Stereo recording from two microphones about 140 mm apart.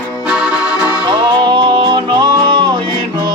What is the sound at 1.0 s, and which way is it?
Music, 35° right (ahead or behind).